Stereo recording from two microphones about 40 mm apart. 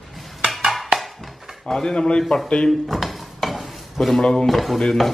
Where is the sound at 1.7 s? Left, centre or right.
Centre.